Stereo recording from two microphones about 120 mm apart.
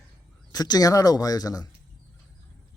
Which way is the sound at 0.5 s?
30° left (ahead or behind).